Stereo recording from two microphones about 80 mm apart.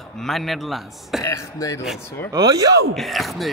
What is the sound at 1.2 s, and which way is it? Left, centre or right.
Speech, left.